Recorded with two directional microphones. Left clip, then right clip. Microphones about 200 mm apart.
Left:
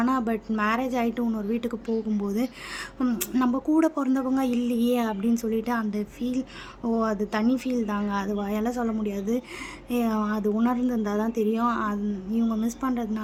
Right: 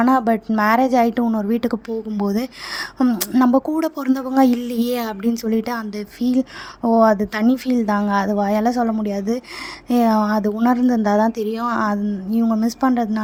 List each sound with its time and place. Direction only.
0.0 s speech: 45° right (ahead or behind)